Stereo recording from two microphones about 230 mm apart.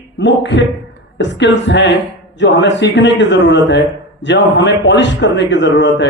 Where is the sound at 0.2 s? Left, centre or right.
Left.